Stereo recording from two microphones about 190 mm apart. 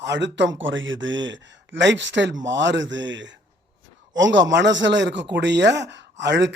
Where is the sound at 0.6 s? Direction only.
80° right.